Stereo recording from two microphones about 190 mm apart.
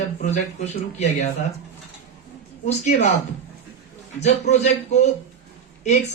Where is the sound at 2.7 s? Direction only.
35° left (ahead or behind).